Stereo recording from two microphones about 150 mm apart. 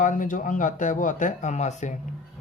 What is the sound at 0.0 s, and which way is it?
Speech, 60° left (ahead or behind).